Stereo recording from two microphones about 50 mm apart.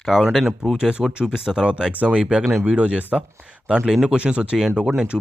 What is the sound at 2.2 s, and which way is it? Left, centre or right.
Speech, centre.